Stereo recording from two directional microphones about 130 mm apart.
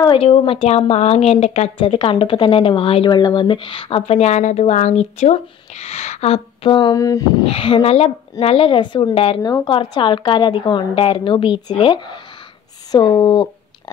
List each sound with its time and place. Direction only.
0.0 s speech: 45° left (ahead or behind)
7.0 s speech: 25° left (ahead or behind)
7.4 s a woman's voice: 45° left (ahead or behind)